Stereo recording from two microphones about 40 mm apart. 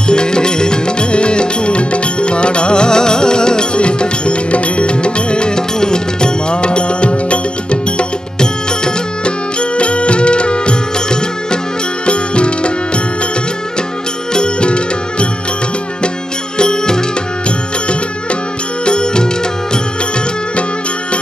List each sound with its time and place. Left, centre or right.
0.1 s music: left
14.3 s music: left
16.5 s music: centre
18.9 s music: left